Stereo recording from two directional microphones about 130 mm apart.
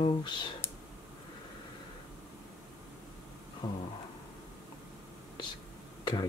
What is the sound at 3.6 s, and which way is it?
Speech, 40° left (ahead or behind).